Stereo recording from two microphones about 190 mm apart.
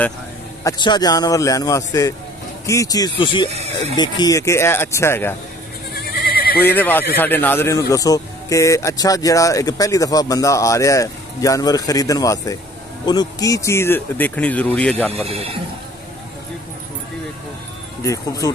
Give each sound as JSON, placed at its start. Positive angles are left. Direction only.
{"t": 0.7, "sound": "a man's voice", "side_deg": 25}
{"t": 3.5, "sound": "speech", "side_deg": -35}
{"t": 3.9, "sound": "speech", "side_deg": 20}
{"t": 5.9, "sound": "a sound", "side_deg": 55}
{"t": 6.6, "sound": "speech", "side_deg": 10}
{"t": 15.2, "sound": "speech", "side_deg": -30}
{"t": 18.0, "sound": "speech", "side_deg": 15}